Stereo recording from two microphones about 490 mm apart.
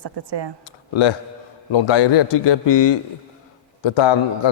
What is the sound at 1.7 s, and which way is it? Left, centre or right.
A man's voice, left.